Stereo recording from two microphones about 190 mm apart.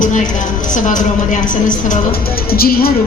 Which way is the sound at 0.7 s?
40° left (ahead or behind).